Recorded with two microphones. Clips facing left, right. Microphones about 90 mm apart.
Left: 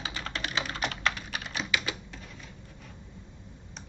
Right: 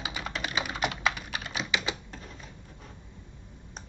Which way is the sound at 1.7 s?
20° right (ahead or behind).